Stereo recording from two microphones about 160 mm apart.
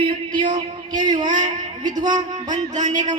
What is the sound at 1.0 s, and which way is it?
Speech, 25° right (ahead or behind).